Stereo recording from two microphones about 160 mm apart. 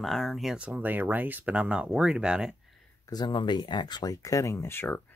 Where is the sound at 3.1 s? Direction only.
30° left (ahead or behind).